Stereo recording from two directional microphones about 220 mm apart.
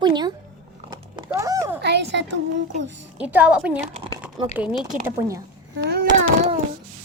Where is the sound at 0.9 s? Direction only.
15° right (ahead or behind).